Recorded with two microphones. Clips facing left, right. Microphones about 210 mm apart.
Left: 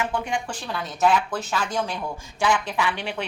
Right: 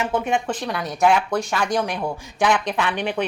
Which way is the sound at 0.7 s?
70° right (ahead or behind).